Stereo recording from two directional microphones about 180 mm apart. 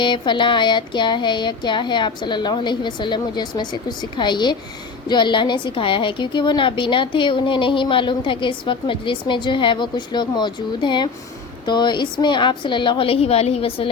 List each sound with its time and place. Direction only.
0.0 s a woman's voice: 25° left (ahead or behind)